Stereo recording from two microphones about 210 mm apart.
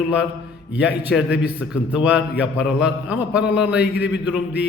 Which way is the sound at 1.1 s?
Centre (ahead or behind).